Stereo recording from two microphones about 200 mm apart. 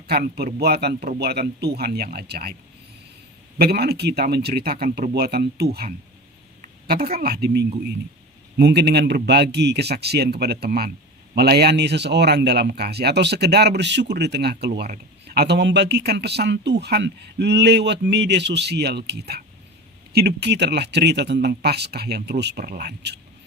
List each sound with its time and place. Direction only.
0.1 s a man's voice: 50° right (ahead or behind)
3.6 s a man's voice: 50° right (ahead or behind)